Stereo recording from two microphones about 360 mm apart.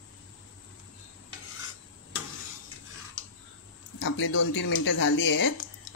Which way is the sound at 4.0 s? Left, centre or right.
Left.